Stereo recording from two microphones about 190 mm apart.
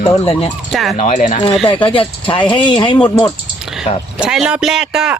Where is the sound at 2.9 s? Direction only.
10° left (ahead or behind).